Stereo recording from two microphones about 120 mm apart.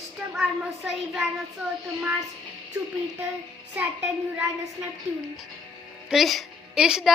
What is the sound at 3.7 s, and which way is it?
Speech, 10° right (ahead or behind).